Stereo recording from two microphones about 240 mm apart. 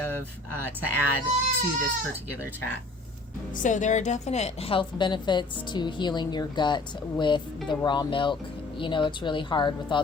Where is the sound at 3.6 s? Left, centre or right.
Left.